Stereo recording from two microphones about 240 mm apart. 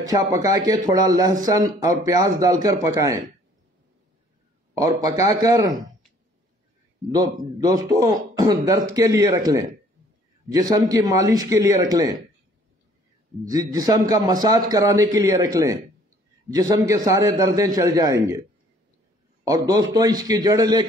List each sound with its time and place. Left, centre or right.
0.3 s speech: centre
4.7 s speech: centre
7.1 s speech: centre
13.5 s speech: centre
19.4 s speech: centre